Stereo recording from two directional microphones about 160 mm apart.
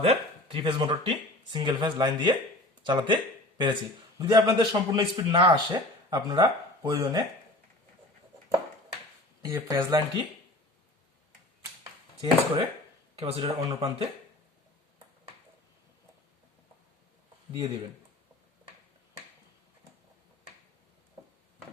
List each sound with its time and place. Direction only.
0.0 s speech: 35° right (ahead or behind)
4.2 s speech: 25° right (ahead or behind)
4.9 s speech: 35° right (ahead or behind)
9.4 s speech: 20° right (ahead or behind)
11.8 s a sound: 30° right (ahead or behind)
13.1 s speech: 40° right (ahead or behind)